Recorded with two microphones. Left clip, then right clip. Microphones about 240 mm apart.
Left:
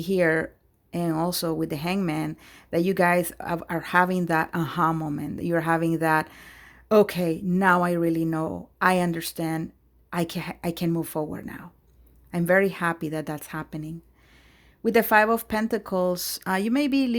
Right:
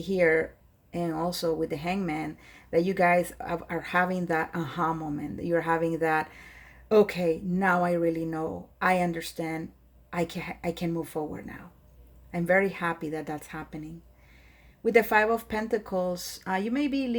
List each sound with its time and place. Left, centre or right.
0.0 s speech: left
14.8 s speech: left